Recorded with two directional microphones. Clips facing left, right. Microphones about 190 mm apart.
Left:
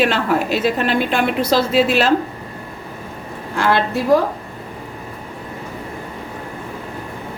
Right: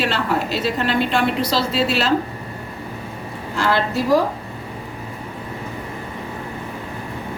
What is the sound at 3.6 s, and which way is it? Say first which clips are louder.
Speech: left 2 dB; 55° left (ahead or behind).